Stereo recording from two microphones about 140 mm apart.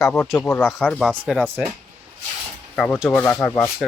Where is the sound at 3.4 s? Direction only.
15° left (ahead or behind).